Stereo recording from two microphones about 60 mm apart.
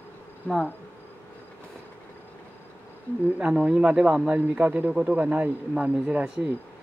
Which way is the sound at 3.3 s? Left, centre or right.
Right.